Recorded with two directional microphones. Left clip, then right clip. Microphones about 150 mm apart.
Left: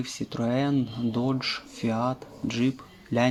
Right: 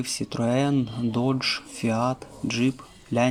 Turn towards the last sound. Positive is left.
turn(degrees=-5)  # may be behind; listen again after turning